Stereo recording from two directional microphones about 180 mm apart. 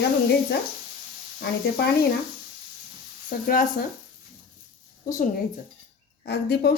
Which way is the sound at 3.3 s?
50° left (ahead or behind).